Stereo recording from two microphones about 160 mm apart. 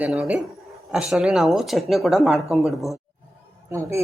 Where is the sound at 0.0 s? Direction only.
5° right (ahead or behind).